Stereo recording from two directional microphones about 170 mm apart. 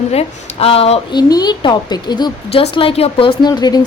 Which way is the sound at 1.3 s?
25° left (ahead or behind).